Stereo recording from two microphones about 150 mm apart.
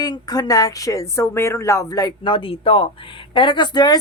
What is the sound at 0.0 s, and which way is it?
A woman's voice, 25° left (ahead or behind).